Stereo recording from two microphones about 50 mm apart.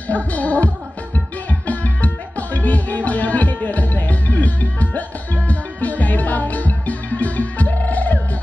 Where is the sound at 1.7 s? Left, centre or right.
Left.